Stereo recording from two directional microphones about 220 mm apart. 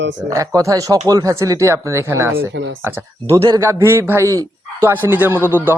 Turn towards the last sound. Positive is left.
turn(degrees=-10)  # may be behind; listen again after turning